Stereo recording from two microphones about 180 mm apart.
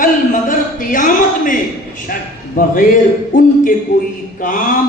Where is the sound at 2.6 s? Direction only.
50° left (ahead or behind).